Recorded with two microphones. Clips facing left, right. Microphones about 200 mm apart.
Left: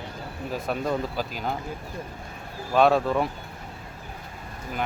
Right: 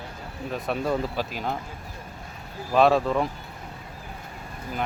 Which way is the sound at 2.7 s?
Centre (ahead or behind).